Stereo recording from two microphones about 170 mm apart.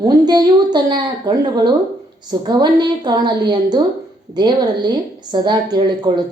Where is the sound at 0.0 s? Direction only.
25° right (ahead or behind).